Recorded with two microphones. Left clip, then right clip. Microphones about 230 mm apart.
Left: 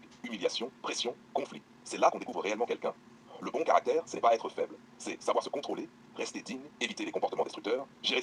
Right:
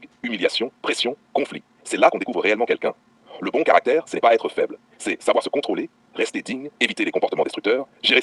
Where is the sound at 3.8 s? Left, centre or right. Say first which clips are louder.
Right 10 dB; right.